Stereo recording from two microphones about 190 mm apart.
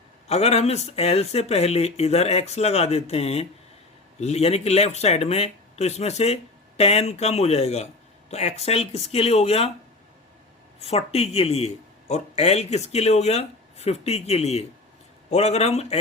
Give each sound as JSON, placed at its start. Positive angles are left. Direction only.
{"t": 0.3, "sound": "speech", "side_deg": 35}
{"t": 10.8, "sound": "speech", "side_deg": 35}